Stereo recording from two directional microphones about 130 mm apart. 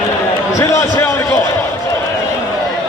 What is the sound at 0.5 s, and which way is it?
Speech, 20° left (ahead or behind).